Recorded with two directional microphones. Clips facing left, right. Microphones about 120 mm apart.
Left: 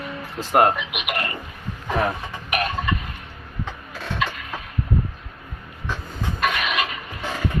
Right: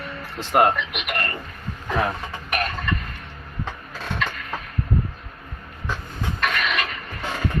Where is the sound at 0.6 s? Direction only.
5° left (ahead or behind).